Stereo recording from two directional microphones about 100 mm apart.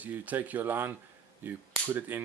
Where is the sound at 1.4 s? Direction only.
20° right (ahead or behind).